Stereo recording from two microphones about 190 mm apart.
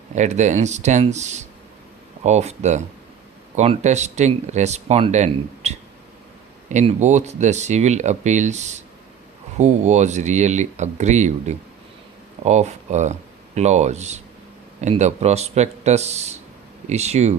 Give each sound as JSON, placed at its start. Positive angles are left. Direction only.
{"t": 0.1, "sound": "speech", "side_deg": -40}